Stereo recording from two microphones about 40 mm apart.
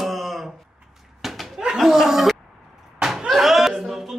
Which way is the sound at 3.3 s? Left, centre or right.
Centre.